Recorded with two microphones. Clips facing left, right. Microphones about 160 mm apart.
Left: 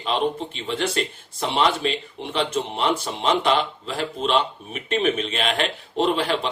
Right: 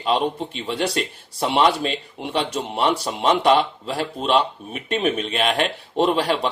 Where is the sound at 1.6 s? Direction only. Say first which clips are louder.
Right 2 dB; 40° right (ahead or behind).